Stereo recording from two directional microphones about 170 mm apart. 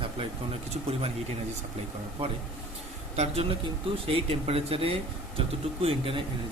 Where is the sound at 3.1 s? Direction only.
40° right (ahead or behind).